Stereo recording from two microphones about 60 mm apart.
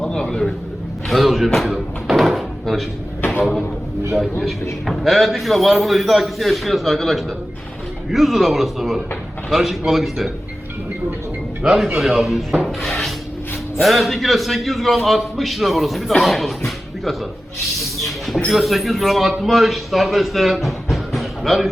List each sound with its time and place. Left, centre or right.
0.0 s a sound: centre
1.0 s a man's voice: centre
1.5 s a sound: centre
3.2 s a sound: left
4.1 s a man's voice: centre
11.6 s a man's voice: centre
17.7 s rodents: centre
18.5 s a man's voice: centre
20.9 s basketball bounce: centre